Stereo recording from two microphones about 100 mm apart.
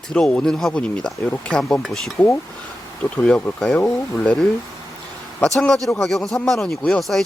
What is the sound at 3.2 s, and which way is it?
Speech, 10° left (ahead or behind).